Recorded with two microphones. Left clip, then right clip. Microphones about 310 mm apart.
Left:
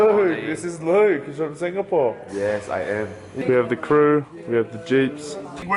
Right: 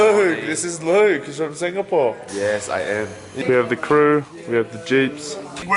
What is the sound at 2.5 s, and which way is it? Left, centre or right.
Speech, centre.